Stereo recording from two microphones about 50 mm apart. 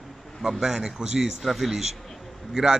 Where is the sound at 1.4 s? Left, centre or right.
Centre.